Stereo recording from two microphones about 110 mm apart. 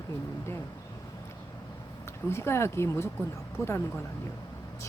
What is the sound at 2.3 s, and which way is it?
Speech, 25° left (ahead or behind).